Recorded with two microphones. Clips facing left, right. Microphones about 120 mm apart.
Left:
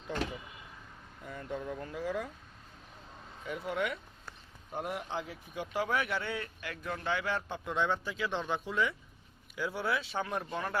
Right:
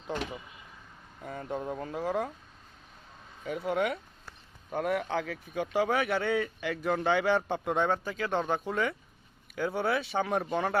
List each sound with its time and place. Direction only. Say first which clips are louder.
1.2 s speech: right 4 dB; 55° right (ahead or behind); by 2.2 s 40° right (ahead or behind)
3.4 s speech: right 5 dB; 60° right (ahead or behind)
4.7 s speech: right 7 dB; 70° right (ahead or behind); by 10.8 s 85° right